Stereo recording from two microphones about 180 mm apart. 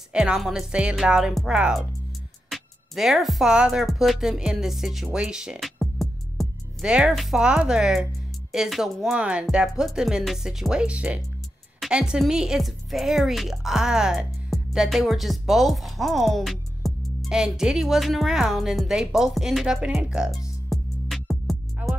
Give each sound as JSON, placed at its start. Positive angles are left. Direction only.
{"t": 0.1, "sound": "speech", "side_deg": -5}